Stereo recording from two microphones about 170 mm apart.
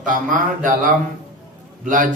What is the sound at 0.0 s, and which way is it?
Speech, 50° right (ahead or behind).